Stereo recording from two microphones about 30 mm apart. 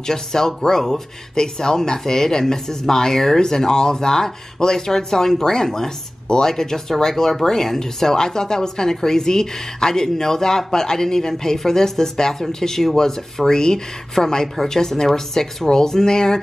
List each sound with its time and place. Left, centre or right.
0.0 s speech: centre
13.5 s speech: left